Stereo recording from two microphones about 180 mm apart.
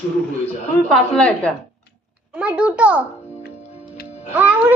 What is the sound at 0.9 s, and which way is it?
Speech, 5° left (ahead or behind).